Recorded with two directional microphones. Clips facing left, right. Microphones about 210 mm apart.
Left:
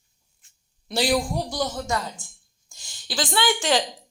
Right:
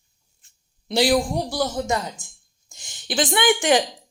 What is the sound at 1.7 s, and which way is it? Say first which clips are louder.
Speech: right 3 dB; 20° right (ahead or behind).